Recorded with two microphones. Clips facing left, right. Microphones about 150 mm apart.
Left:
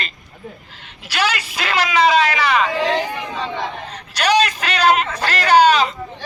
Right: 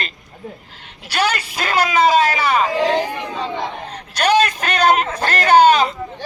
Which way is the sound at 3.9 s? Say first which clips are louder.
Right 1 dB; 50° right (ahead or behind).